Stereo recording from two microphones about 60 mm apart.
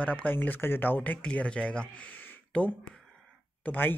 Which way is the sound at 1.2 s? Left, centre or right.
Centre.